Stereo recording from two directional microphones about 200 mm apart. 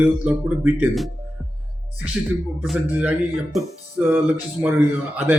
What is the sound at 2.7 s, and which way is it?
Speech, 5° right (ahead or behind).